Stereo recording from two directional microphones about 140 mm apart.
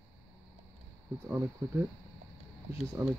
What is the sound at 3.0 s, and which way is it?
Speech, 20° right (ahead or behind).